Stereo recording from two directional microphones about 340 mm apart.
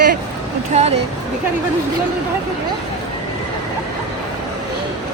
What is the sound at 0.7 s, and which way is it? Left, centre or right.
Speech, centre.